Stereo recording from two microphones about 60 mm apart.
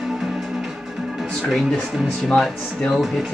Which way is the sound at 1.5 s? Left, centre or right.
Centre.